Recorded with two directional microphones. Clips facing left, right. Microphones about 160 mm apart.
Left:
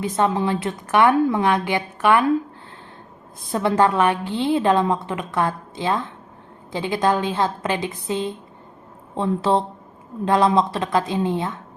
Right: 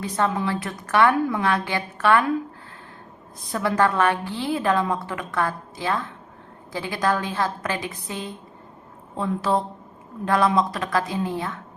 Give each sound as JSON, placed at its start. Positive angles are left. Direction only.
{"t": 0.0, "sound": "a woman's voice", "side_deg": 20}
{"t": 3.5, "sound": "a woman's voice", "side_deg": 25}